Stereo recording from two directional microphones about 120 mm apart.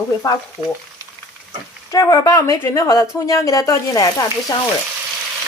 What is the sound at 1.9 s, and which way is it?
Speech, 30° left (ahead or behind).